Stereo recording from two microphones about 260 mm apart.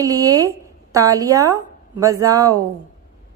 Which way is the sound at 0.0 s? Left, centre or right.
Centre.